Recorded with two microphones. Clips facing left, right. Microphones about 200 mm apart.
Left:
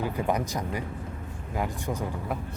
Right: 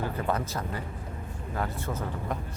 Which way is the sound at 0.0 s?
15° left (ahead or behind).